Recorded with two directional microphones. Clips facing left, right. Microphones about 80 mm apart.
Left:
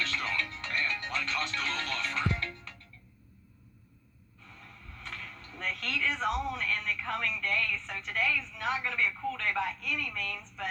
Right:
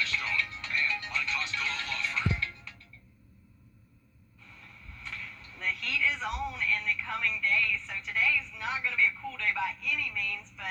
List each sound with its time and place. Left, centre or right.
0.0 s music: left
5.5 s speech: left